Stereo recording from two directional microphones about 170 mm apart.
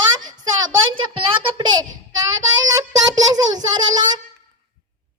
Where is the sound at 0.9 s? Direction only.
30° right (ahead or behind).